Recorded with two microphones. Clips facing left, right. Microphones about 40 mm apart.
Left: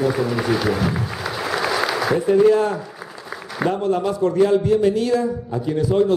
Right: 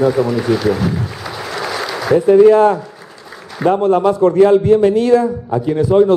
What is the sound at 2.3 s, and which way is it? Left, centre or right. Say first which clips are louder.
A man's voice: right 8 dB; right.